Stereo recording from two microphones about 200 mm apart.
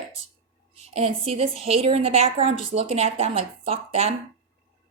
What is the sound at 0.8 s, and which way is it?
A woman's voice, 30° right (ahead or behind).